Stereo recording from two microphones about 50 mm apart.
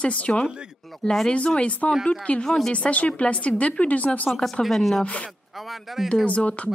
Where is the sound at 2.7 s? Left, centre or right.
Left.